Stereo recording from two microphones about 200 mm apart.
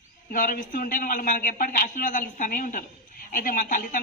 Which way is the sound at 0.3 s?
45° left (ahead or behind).